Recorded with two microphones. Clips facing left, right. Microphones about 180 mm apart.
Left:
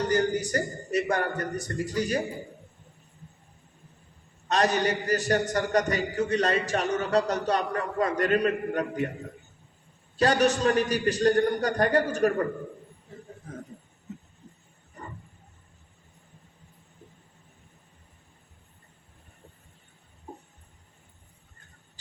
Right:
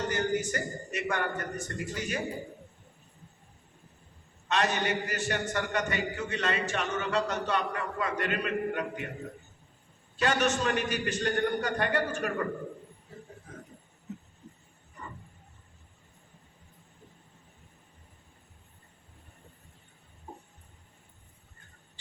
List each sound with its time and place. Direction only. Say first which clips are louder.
0.1 s a man's voice: left 5 dB; 35° left (ahead or behind)
4.4 s a man's voice: left 4 dB; 40° left (ahead or behind)
10.2 s a man's voice: left 5 dB; 35° left (ahead or behind)
15.0 s wild animals: left 2 dB; 40° left (ahead or behind)